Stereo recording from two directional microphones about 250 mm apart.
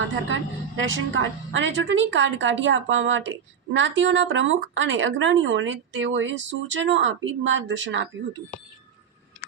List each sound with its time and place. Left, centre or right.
0.8 s a woman's voice: right